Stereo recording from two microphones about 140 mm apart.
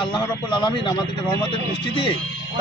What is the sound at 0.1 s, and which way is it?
Speech, 35° left (ahead or behind).